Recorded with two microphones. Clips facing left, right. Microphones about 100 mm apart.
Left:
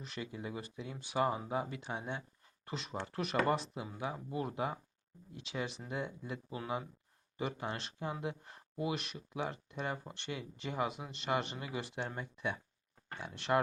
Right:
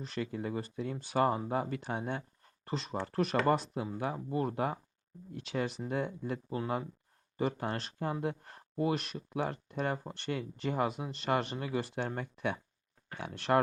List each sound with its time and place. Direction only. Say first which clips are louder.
0.0 s speech: right 6 dB; 40° right (ahead or behind)
0.3 s speech: right 6 dB; 50° right (ahead or behind)
2.6 s speech: right 5 dB; 35° right (ahead or behind)